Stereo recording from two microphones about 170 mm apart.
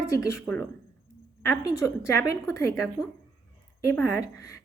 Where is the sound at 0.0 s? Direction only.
20° left (ahead or behind).